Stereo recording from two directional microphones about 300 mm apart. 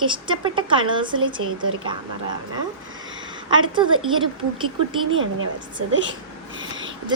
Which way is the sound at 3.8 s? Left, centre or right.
Centre.